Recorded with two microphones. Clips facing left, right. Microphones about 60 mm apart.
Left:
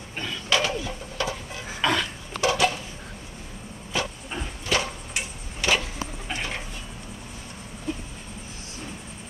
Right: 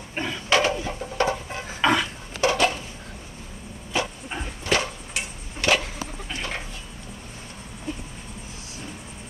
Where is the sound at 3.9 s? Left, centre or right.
Centre.